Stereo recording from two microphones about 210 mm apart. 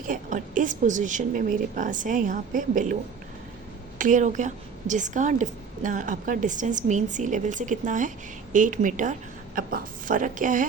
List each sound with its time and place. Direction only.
0.1 s a woman's voice: 40° right (ahead or behind)